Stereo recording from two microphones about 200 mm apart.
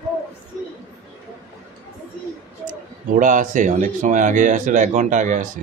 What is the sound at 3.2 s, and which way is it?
Speech, 40° right (ahead or behind).